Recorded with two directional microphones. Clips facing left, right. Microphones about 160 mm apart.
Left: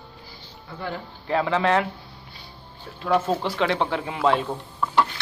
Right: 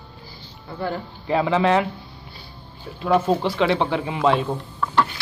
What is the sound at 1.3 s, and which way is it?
Speech, 10° right (ahead or behind).